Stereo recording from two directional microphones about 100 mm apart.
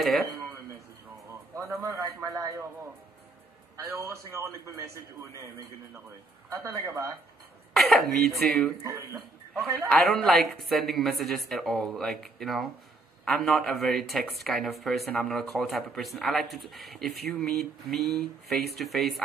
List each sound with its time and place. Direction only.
0.0 s a sound: centre (ahead or behind)
1.5 s a man's voice: 30° right (ahead or behind)
6.6 s a man's voice: 30° right (ahead or behind)
7.7 s speech: centre (ahead or behind)
8.8 s a man's voice: 25° right (ahead or behind)
9.8 s speech: 5° left (ahead or behind)